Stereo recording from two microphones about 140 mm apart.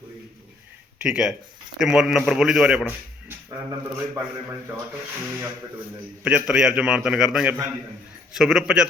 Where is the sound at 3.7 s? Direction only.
20° right (ahead or behind).